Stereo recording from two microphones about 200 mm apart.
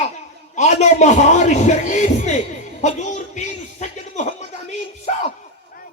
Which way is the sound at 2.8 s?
35° left (ahead or behind).